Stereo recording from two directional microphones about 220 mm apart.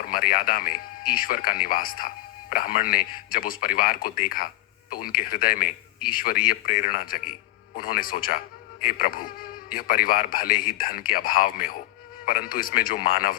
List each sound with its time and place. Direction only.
0.0 s speech: 40° left (ahead or behind)